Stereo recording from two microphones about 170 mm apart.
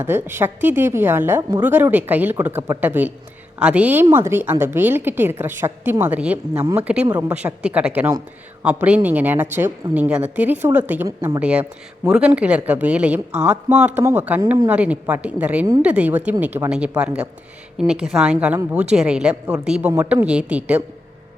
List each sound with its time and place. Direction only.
0.0 s a woman's voice: 10° right (ahead or behind)
1.4 s speech: 25° right (ahead or behind)
1.6 s a woman's voice: 10° right (ahead or behind)